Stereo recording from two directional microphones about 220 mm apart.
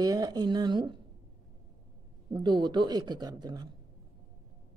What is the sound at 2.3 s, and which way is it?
A woman's voice, 20° right (ahead or behind).